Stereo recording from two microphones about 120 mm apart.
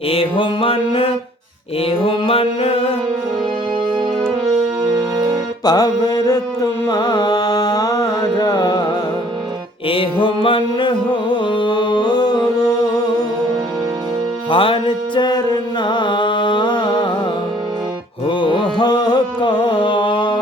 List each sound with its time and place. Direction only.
0.1 s mantra: 45° left (ahead or behind)
5.6 s carnatic music: 35° left (ahead or behind)
9.9 s music: 45° left (ahead or behind)
14.5 s music: 45° left (ahead or behind)
15.8 s carnatic music: 40° left (ahead or behind)
18.3 s carnatic music: 40° left (ahead or behind)
18.8 s music: 35° left (ahead or behind)